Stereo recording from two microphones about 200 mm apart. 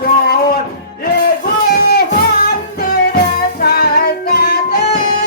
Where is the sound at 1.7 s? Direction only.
50° left (ahead or behind).